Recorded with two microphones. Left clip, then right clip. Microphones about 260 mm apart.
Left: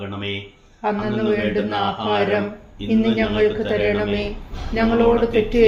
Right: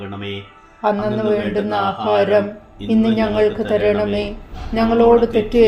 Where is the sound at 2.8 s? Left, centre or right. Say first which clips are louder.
Right 2 dB; right.